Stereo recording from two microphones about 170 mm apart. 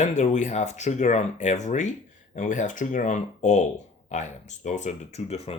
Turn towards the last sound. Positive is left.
turn(degrees=35)  # may be behind; listen again after turning